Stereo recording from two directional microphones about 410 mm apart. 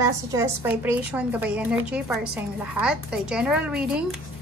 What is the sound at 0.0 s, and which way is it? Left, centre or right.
Speech, centre.